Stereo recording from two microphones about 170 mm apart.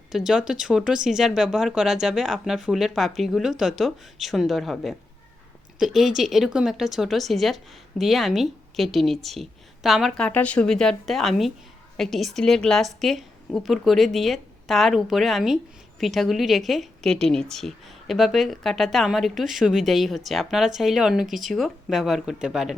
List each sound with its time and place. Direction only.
0.1 s a woman's voice: centre (ahead or behind)